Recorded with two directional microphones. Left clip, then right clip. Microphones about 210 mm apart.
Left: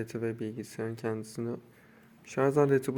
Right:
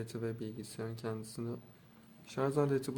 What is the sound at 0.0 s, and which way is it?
Speech, 15° left (ahead or behind).